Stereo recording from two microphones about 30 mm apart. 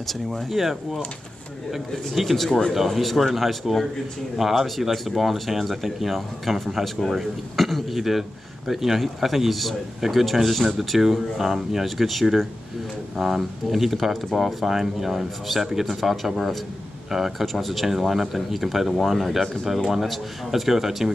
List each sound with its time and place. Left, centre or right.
0.0 s speech: centre
0.6 s a man's voice: centre
2.3 s speech: centre
2.7 s a man's voice: centre
7.9 s a man's voice: centre
10.3 s speech: centre
10.8 s a man's voice: centre
17.5 s speech: centre
17.8 s a man's voice: centre